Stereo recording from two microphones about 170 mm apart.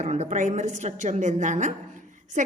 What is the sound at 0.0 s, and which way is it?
A woman's voice, 40° right (ahead or behind).